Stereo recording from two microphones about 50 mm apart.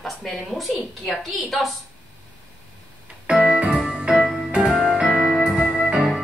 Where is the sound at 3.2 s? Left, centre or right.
Centre.